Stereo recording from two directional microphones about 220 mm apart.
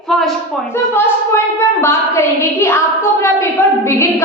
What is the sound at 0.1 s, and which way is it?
Speech, centre (ahead or behind).